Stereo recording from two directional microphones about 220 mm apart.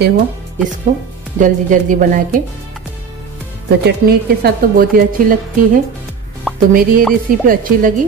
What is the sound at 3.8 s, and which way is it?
A woman's voice, 45° right (ahead or behind).